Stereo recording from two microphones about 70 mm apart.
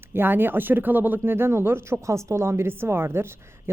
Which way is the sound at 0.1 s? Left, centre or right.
Right.